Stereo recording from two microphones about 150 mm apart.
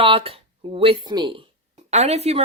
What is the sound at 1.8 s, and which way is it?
Speech, 50° right (ahead or behind).